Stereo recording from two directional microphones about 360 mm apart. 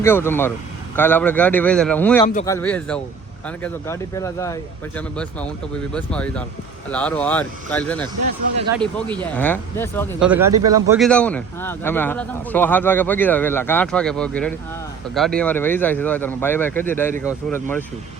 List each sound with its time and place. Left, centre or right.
0.0 s a man's voice: centre
2.2 s speech: centre
2.6 s a man's voice: centre
8.5 s speech: centre
8.8 s a man's voice: centre
10.2 s speech: centre
10.6 s speech: right
10.8 s a man's voice: centre